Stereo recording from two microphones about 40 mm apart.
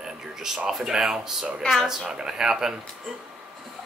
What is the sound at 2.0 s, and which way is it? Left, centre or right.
Speech, right.